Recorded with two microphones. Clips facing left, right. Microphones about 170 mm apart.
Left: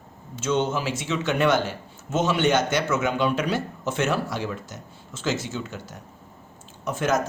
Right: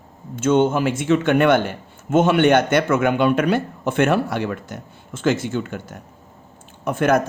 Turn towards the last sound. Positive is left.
turn(degrees=-55)  # may be behind; listen again after turning